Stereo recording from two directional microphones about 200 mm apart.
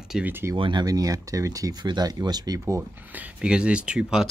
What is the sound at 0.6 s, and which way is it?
Speech, 25° right (ahead or behind).